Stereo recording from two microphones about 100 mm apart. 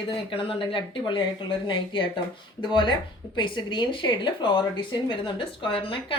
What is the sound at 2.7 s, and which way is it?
Speech, 50° left (ahead or behind).